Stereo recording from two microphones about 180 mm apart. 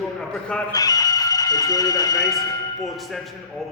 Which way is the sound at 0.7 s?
20° left (ahead or behind).